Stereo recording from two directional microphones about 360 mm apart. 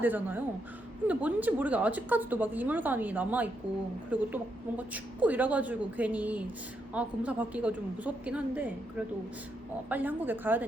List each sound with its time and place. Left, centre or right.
0.0 s a woman's voice: centre
9.9 s a woman's voice: centre